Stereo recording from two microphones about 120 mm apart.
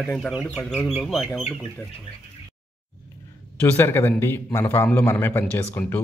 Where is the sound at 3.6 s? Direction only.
20° left (ahead or behind).